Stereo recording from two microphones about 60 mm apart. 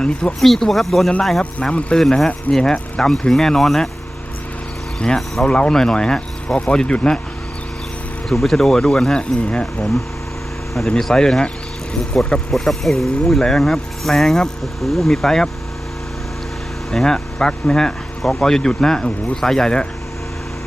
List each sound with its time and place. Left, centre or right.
0.0 s speech: centre
0.3 s speech: centre
4.9 s speech: centre
8.3 s speech: centre
10.8 s speech: centre
16.9 s speech: centre